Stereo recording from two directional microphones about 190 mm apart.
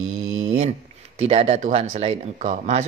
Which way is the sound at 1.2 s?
35° right (ahead or behind).